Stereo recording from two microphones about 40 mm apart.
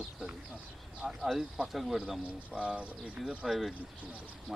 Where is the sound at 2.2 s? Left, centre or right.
Right.